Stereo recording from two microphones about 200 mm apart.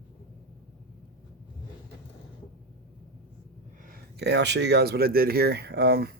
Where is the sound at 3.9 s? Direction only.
55° right (ahead or behind).